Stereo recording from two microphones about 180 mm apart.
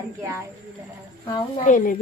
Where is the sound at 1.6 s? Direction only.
45° left (ahead or behind).